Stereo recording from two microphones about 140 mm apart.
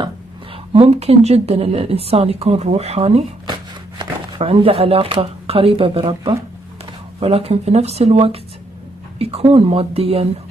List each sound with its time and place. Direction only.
0.7 s a woman's voice: 50° right (ahead or behind)